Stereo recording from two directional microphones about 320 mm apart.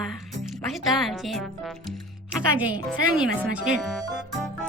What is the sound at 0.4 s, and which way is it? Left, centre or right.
Speech, centre.